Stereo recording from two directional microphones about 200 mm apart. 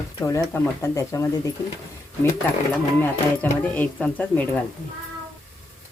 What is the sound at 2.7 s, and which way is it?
Speech, 10° left (ahead or behind).